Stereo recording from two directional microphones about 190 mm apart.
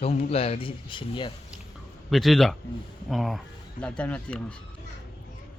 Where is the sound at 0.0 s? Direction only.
30° left (ahead or behind).